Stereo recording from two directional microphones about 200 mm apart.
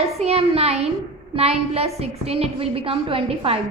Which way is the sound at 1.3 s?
30° right (ahead or behind).